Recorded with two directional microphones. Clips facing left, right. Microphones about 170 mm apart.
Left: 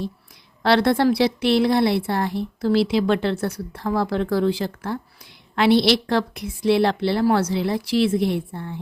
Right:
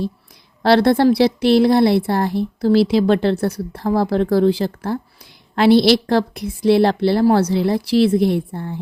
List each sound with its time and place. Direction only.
0.6 s a woman's voice: 35° right (ahead or behind)